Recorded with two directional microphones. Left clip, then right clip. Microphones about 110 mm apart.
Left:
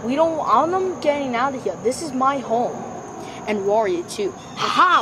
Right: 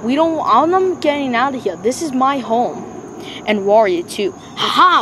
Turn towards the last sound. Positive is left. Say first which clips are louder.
# right 4 dB
turn(degrees=-25)  # may be behind; listen again after turning